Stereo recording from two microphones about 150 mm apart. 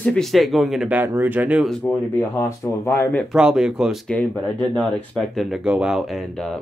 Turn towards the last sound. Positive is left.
turn(degrees=0)  # may be behind; listen again after turning